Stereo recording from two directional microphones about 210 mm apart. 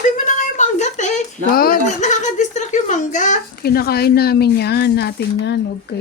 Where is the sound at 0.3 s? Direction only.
35° left (ahead or behind); by 5.5 s 50° left (ahead or behind).